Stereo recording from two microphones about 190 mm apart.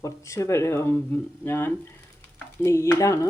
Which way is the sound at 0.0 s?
15° left (ahead or behind).